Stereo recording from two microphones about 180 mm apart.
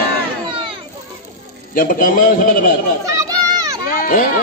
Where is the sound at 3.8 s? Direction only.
50° left (ahead or behind).